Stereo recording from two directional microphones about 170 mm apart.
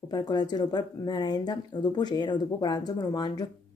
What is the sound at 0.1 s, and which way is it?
Speech, 25° left (ahead or behind).